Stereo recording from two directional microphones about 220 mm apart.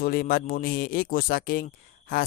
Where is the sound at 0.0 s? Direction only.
45° left (ahead or behind).